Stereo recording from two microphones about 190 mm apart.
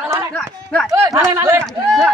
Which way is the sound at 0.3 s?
5° left (ahead or behind).